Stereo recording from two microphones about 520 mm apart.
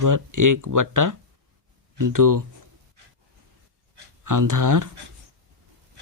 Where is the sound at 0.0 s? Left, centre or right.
Right.